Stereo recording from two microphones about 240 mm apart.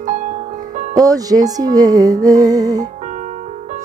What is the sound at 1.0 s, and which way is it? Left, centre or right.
A woman's voice, centre.